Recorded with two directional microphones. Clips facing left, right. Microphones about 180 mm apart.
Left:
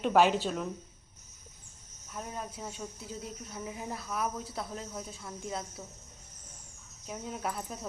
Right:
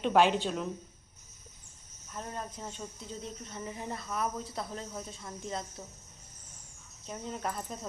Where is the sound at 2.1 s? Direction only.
5° left (ahead or behind).